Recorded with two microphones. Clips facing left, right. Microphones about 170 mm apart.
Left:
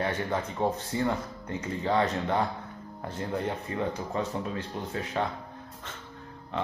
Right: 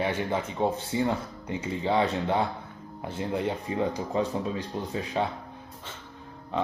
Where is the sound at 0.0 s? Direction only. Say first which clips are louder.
Right 2 dB; 10° right (ahead or behind).